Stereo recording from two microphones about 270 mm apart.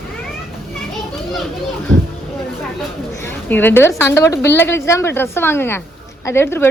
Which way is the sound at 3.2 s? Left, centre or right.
Centre.